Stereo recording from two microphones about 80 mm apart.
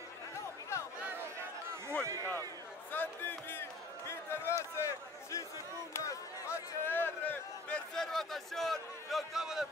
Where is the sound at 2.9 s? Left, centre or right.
Left.